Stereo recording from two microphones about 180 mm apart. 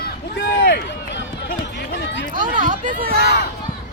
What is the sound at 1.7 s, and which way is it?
Chatter, 75° left (ahead or behind).